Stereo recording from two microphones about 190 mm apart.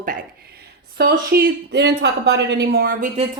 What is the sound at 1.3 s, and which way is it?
A woman's voice, 55° right (ahead or behind).